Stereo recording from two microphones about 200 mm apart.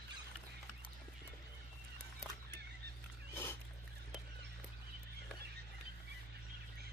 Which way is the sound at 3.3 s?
10° left (ahead or behind).